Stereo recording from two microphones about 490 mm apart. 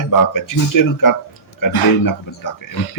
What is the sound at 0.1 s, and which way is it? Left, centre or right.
Speech, left.